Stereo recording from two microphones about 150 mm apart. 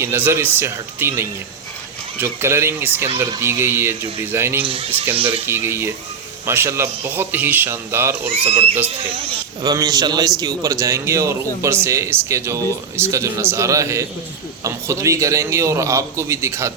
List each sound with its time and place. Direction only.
0.0 s speech: 15° right (ahead or behind)
4.6 s speech: 40° right (ahead or behind)
5.5 s speech: 15° right (ahead or behind)
8.3 s speech: 40° right (ahead or behind)
9.6 s a man's voice: 25° right (ahead or behind)